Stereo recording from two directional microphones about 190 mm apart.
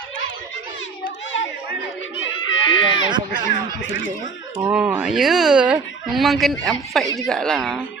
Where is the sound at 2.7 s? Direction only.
25° left (ahead or behind).